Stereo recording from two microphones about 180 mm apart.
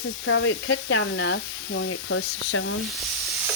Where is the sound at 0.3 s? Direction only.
85° left.